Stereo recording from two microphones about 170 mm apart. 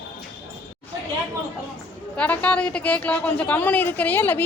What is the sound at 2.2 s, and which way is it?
A woman's voice, 10° left (ahead or behind).